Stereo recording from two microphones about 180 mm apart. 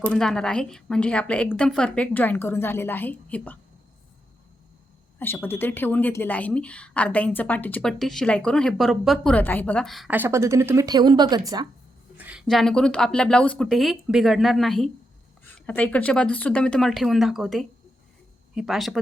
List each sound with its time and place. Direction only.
0.0 s a woman's voice: 5° left (ahead or behind)
5.2 s a woman's voice: 10° left (ahead or behind)
10.2 s speech: 15° right (ahead or behind)
12.1 s speech: 5° right (ahead or behind)